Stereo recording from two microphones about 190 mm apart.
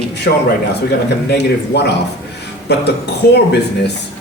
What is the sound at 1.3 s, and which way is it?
Speech, 60° left (ahead or behind).